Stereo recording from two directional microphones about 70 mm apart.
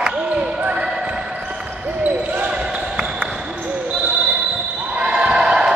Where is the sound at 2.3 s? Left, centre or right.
Centre.